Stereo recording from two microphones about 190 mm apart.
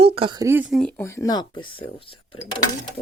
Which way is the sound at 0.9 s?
15° left (ahead or behind).